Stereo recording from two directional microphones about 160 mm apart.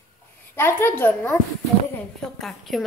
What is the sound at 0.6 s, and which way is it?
Speech, 15° left (ahead or behind).